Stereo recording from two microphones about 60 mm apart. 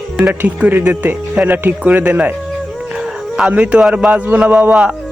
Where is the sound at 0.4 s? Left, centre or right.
Right.